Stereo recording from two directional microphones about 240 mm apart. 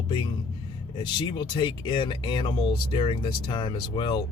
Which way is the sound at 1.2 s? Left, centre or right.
Centre.